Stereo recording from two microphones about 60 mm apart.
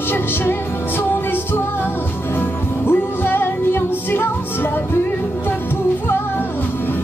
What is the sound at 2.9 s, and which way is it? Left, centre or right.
Music, left.